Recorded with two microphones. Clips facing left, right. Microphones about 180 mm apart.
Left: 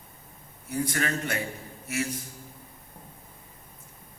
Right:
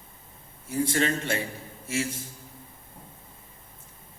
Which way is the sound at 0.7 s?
25° right (ahead or behind).